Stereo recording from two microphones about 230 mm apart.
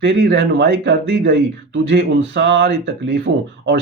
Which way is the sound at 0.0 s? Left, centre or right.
Right.